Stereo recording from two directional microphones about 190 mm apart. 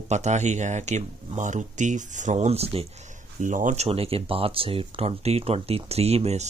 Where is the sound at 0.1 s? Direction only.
35° right (ahead or behind).